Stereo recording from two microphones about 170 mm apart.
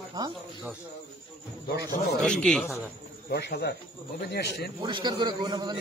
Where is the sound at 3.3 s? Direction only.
75° left (ahead or behind).